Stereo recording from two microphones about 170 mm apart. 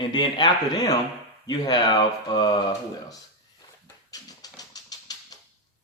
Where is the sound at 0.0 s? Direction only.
25° left (ahead or behind).